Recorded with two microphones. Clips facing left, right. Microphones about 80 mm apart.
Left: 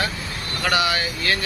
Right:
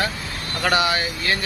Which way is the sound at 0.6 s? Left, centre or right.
Right.